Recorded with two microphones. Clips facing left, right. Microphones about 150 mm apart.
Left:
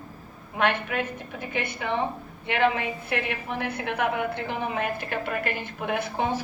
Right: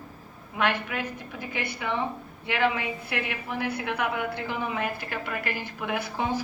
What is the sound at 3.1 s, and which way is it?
A woman's voice, 45° left (ahead or behind).